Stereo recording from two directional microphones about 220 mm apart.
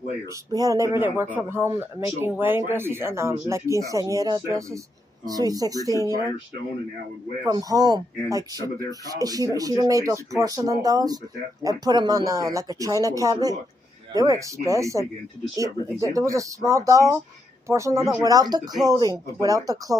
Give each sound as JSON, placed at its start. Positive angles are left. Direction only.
{"t": 0.3, "sound": "speech", "side_deg": -15}
{"t": 7.4, "sound": "speech", "side_deg": -15}